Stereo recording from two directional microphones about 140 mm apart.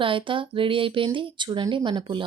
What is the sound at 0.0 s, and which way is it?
Speech, 35° right (ahead or behind).